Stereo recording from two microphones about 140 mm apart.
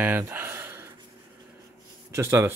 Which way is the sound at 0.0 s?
15° right (ahead or behind).